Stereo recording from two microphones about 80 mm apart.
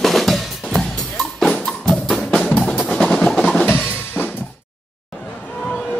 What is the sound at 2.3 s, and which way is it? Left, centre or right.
Music, centre.